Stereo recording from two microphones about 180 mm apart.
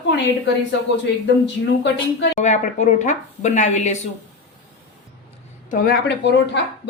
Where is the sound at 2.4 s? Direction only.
40° left (ahead or behind).